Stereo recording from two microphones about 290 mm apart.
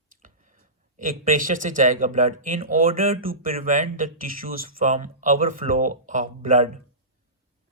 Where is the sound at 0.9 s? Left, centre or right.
Right.